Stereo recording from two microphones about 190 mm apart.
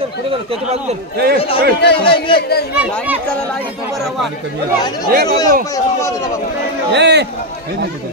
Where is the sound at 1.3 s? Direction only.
30° left (ahead or behind).